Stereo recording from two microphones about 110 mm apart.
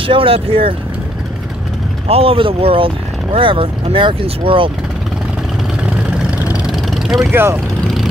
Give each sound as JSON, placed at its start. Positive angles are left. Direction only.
{"t": 0.0, "sound": "speech", "side_deg": -55}
{"t": 2.0, "sound": "speech", "side_deg": -60}
{"t": 5.8, "sound": "vehicle", "side_deg": -10}
{"t": 7.2, "sound": "speech", "side_deg": -20}